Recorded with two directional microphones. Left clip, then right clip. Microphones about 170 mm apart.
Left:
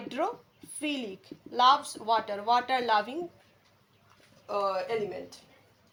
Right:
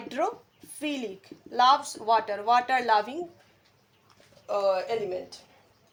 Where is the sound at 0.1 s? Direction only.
40° right (ahead or behind).